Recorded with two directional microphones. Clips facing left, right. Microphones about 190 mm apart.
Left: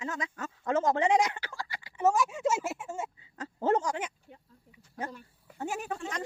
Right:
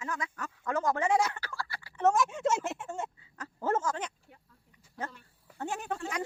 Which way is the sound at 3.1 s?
20° left (ahead or behind).